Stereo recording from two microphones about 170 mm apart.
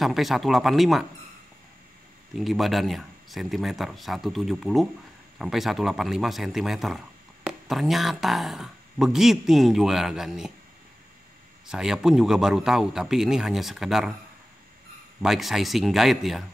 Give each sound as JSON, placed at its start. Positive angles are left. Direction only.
{"t": 0.0, "sound": "speech", "side_deg": 0}
{"t": 2.3, "sound": "speech", "side_deg": 0}
{"t": 11.6, "sound": "speech", "side_deg": -5}
{"t": 15.2, "sound": "speech", "side_deg": 0}